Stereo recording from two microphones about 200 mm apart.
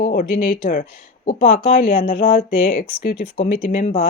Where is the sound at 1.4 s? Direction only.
40° left (ahead or behind).